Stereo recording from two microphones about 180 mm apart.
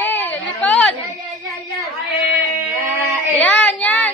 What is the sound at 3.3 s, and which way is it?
Child singing, 10° left (ahead or behind).